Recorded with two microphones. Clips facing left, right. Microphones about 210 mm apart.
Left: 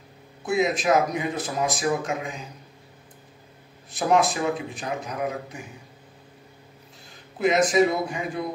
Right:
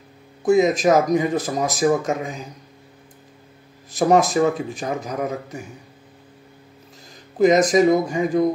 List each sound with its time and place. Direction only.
0.4 s speech: 45° right (ahead or behind)
3.9 s speech: 40° right (ahead or behind)
7.3 s speech: 40° right (ahead or behind)